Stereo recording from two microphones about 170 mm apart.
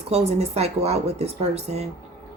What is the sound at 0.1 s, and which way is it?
Speech, 40° right (ahead or behind).